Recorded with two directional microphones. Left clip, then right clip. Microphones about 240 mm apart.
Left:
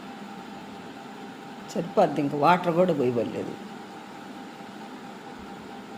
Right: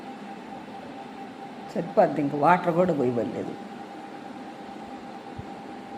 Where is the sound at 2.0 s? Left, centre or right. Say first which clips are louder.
Right 1 dB; centre.